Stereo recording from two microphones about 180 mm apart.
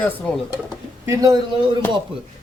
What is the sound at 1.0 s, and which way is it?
Speech, 20° right (ahead or behind).